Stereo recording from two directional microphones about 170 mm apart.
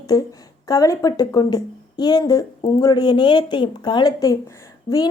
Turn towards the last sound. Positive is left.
turn(degrees=20)  # may be behind; listen again after turning